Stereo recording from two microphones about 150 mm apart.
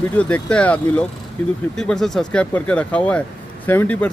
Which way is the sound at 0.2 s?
10° left (ahead or behind).